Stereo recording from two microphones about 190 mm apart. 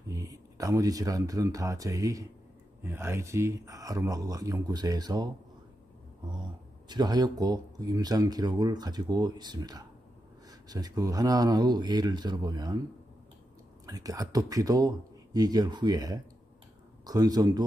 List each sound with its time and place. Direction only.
0.1 s speech: 15° right (ahead or behind)
6.9 s speech: 20° right (ahead or behind)
13.8 s speech: 20° right (ahead or behind)